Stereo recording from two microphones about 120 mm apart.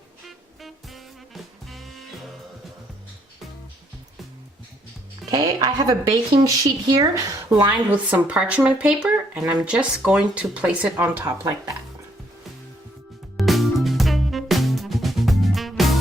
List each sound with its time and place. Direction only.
0.3 s music: centre (ahead or behind)
5.3 s speech: 35° right (ahead or behind)
7.9 s speech: 10° right (ahead or behind)
13.3 s music: centre (ahead or behind)